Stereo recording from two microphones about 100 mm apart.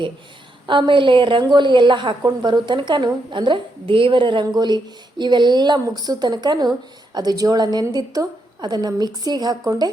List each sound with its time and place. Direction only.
0.7 s a woman's voice: 55° right (ahead or behind)